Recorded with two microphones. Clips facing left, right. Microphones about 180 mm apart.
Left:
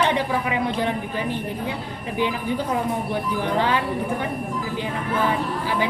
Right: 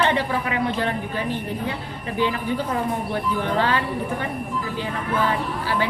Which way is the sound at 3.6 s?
15° left (ahead or behind).